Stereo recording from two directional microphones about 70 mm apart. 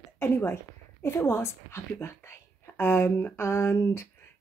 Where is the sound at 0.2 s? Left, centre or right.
Left.